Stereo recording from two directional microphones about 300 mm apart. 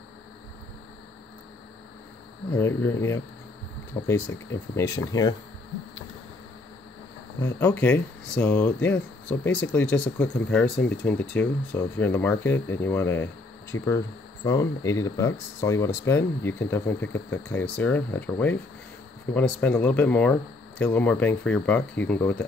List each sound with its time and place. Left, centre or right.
2.5 s speech: centre
7.3 s speech: centre